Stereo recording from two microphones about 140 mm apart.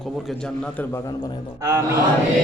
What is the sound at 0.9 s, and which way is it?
Speech, 25° left (ahead or behind).